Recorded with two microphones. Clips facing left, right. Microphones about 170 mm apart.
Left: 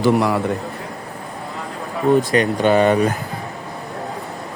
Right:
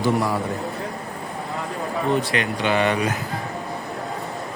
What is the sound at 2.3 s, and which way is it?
Speech, 45° left (ahead or behind).